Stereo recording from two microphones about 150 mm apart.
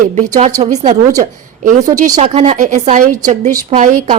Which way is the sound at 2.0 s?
50° right (ahead or behind).